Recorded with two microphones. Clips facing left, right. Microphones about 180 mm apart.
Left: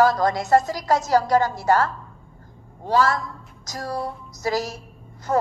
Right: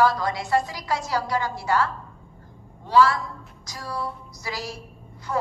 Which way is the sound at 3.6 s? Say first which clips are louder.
Left 4 dB; 45° left (ahead or behind).